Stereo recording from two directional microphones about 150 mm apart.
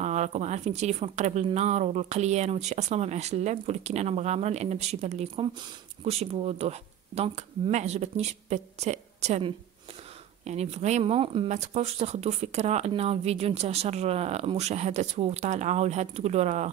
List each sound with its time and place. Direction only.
0.0 s speech: 50° right (ahead or behind)
10.4 s speech: 45° right (ahead or behind)